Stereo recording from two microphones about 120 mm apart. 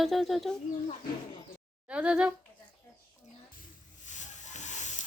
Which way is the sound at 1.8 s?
10° right (ahead or behind).